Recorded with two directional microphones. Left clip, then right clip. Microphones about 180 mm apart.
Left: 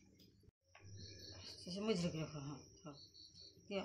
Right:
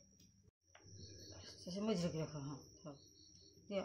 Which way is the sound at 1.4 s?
30° right (ahead or behind).